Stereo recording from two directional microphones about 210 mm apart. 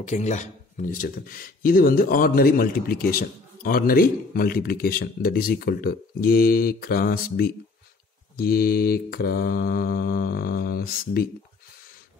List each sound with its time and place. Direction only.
0.0 s speech: 35° left (ahead or behind)